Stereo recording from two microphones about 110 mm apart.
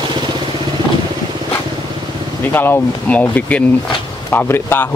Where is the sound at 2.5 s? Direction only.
20° left (ahead or behind).